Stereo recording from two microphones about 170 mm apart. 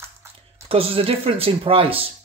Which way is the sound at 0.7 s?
35° right (ahead or behind).